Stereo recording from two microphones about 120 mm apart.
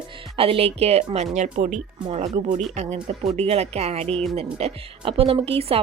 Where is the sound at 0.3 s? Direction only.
50° right (ahead or behind); by 1.8 s 85° right.